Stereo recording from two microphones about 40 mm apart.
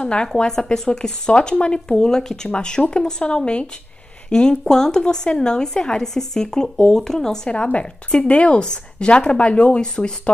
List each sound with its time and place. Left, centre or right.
0.0 s speech: left
7.4 s speech: left